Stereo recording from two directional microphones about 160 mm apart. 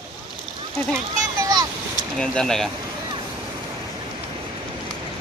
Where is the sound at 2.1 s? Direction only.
5° left (ahead or behind).